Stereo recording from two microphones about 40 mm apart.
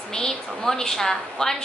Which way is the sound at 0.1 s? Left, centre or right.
Centre.